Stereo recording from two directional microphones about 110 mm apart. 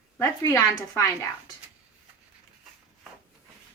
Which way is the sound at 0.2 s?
30° left (ahead or behind).